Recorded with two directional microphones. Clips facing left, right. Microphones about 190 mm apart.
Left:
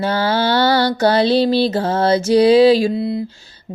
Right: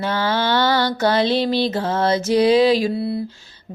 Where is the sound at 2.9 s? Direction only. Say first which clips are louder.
Left 3 dB; 15° left (ahead or behind).